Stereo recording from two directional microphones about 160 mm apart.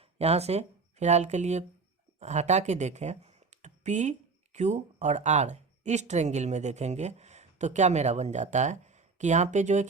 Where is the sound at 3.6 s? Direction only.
45° right (ahead or behind).